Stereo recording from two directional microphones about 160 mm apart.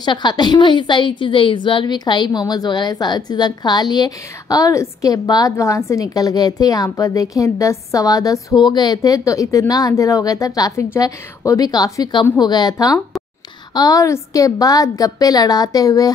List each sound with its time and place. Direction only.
0.0 s a woman's voice: 25° left (ahead or behind)